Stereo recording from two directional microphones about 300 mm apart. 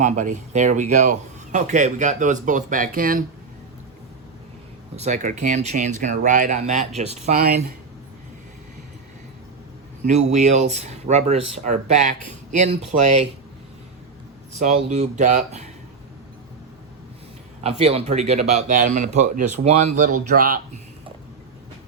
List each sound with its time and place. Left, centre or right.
0.0 s speech: right
4.9 s speech: right
10.1 s speech: right
11.3 s speech: right
11.6 s speech: right
14.6 s speech: right
17.6 s speech: centre